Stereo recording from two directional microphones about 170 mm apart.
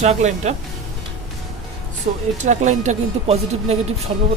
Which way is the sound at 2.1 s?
45° right (ahead or behind).